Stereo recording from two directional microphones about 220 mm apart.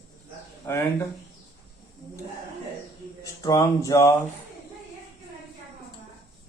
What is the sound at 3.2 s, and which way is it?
Speech, 15° left (ahead or behind).